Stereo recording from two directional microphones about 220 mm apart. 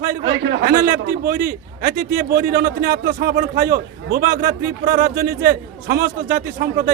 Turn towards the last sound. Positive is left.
turn(degrees=-40)  # may be behind; listen again after turning